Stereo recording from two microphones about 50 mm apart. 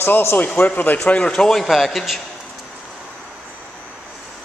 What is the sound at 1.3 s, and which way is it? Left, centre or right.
Speech, centre.